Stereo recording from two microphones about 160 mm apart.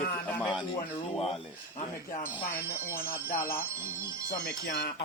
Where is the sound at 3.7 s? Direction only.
15° right (ahead or behind).